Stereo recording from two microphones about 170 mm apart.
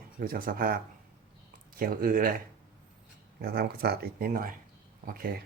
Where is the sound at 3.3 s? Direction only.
70° right (ahead or behind).